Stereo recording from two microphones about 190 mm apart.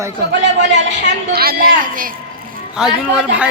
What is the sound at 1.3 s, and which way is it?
Speech, 50° right (ahead or behind).